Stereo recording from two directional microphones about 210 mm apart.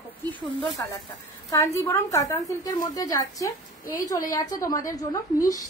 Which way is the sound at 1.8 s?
15° left (ahead or behind).